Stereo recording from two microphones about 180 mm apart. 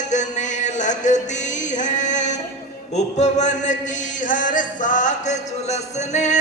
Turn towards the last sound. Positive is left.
turn(degrees=40)  # may be behind; listen again after turning